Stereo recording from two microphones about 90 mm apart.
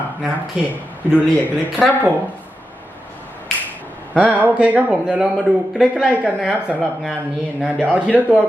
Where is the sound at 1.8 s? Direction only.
Centre (ahead or behind).